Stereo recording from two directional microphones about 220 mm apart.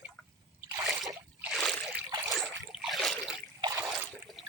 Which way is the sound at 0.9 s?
Centre (ahead or behind).